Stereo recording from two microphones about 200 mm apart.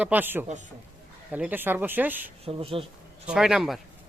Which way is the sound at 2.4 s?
30° right (ahead or behind).